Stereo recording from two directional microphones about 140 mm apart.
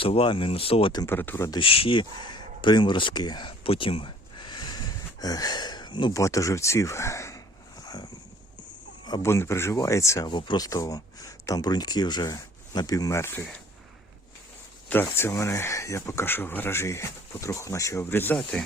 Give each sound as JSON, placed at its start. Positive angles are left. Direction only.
{"t": 0.0, "sound": "speech", "side_deg": 40}
{"t": 1.0, "sound": "speech", "side_deg": 15}
{"t": 1.5, "sound": "speech", "side_deg": 40}
{"t": 9.2, "sound": "speech", "side_deg": 20}
{"t": 10.2, "sound": "speech", "side_deg": 35}
{"t": 14.8, "sound": "speech", "side_deg": 15}